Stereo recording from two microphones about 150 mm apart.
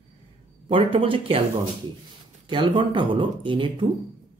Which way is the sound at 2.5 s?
30° right (ahead or behind).